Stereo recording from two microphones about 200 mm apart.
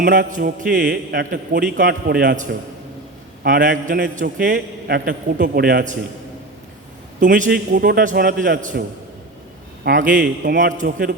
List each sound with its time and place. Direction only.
0.0 s a man's voice: 45° right (ahead or behind)
7.2 s a man's voice: 40° right (ahead or behind)
9.8 s a man's voice: 40° right (ahead or behind)